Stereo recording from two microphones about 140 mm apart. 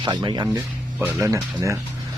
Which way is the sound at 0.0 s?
35° right (ahead or behind).